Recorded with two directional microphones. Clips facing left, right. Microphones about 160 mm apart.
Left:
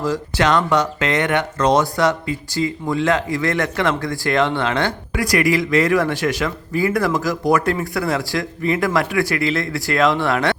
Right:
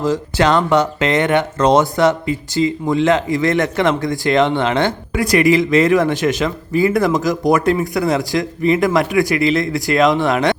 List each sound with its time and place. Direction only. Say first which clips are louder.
0.0 s speech: right 3 dB; 25° right (ahead or behind)